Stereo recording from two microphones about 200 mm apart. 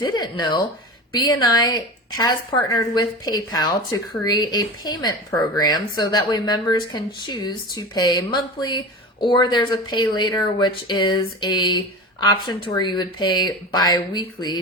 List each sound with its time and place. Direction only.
0.0 s a woman's voice: 20° left (ahead or behind)